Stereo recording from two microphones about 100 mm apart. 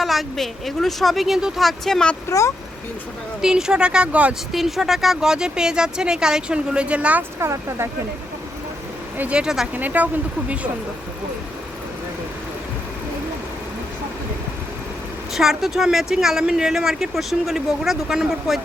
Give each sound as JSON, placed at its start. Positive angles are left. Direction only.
{"t": 0.0, "sound": "speech", "side_deg": 0}
{"t": 3.4, "sound": "speech", "side_deg": -5}
{"t": 4.5, "sound": "speech", "side_deg": 0}
{"t": 7.3, "sound": "speech", "side_deg": -30}
{"t": 9.1, "sound": "speech", "side_deg": -10}
{"t": 15.3, "sound": "speech", "side_deg": -5}